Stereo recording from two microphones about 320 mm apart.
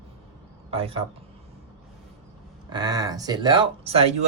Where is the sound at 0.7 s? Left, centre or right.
Centre.